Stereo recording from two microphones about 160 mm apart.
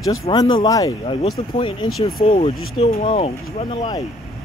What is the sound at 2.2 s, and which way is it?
Speech, 40° left (ahead or behind).